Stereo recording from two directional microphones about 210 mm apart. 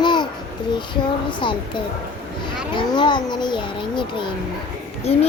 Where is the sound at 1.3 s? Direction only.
20° left (ahead or behind).